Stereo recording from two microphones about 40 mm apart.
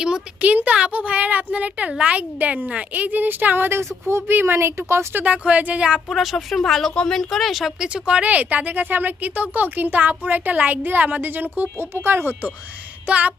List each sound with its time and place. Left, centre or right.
0.4 s a woman's voice: right
5.2 s a woman's voice: right
6.1 s speech: centre
7.8 s speech: right
11.8 s speech: right
13.1 s speech: right